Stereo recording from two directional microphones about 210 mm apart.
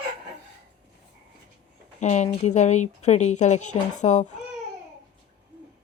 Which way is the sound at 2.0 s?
35° left (ahead or behind).